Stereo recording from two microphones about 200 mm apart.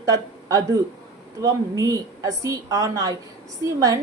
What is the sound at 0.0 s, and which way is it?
A woman's voice, 15° right (ahead or behind).